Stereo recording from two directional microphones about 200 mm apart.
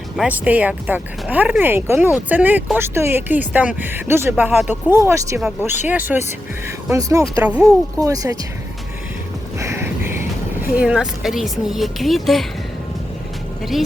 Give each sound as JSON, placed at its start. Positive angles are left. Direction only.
{"t": 0.2, "sound": "speech", "side_deg": -10}
{"t": 9.6, "sound": "music", "side_deg": -15}
{"t": 10.8, "sound": "speech", "side_deg": -5}